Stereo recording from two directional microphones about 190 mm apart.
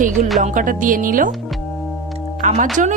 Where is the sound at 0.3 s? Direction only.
45° right (ahead or behind).